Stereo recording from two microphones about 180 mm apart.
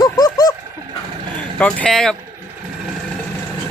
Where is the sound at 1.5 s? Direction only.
5° left (ahead or behind).